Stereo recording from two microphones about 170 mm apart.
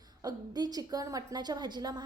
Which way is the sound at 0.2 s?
25° right (ahead or behind).